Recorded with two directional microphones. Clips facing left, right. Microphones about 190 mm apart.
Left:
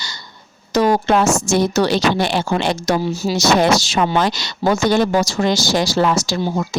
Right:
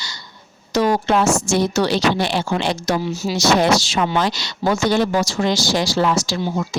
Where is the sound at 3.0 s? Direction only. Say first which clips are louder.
Left 2 dB; 35° left (ahead or behind).